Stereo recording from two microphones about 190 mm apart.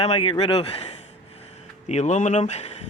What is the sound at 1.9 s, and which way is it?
Speech, 35° left (ahead or behind).